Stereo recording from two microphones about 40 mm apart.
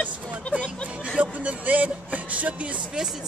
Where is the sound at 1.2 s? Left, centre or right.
Right.